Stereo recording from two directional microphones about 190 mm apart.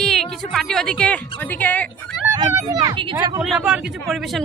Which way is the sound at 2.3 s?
20° right (ahead or behind).